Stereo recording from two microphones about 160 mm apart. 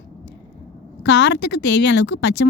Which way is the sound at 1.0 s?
90° left.